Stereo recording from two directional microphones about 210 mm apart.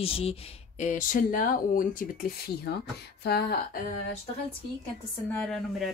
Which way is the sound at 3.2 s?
50° left (ahead or behind).